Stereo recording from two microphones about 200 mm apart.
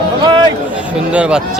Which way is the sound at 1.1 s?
5° right (ahead or behind).